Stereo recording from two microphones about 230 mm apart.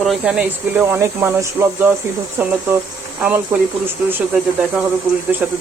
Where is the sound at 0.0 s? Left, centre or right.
Centre.